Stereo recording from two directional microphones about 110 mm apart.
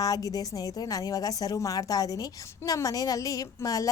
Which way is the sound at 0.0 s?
35° left (ahead or behind).